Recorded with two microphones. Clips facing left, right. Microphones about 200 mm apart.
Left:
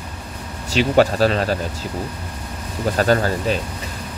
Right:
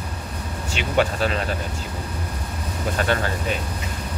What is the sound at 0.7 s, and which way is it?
Speech, 35° left (ahead or behind).